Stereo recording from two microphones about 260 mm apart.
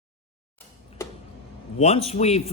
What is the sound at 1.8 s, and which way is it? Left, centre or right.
Speech, left.